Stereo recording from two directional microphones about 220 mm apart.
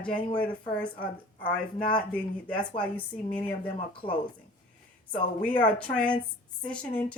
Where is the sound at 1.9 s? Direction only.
5° left (ahead or behind).